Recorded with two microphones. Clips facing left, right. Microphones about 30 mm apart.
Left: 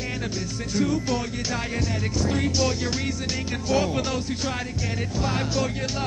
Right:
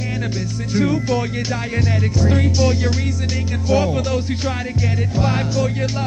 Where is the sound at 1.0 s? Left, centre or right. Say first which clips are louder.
Right 6 dB; centre.